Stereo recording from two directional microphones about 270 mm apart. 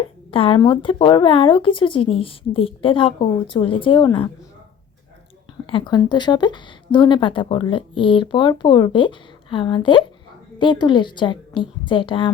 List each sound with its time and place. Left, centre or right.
0.3 s speech: centre
5.6 s speech: centre